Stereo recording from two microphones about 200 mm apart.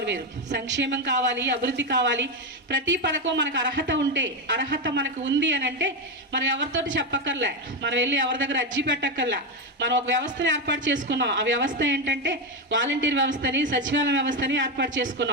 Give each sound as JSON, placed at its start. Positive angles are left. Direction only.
{"t": 0.0, "sound": "a woman's voice", "side_deg": -60}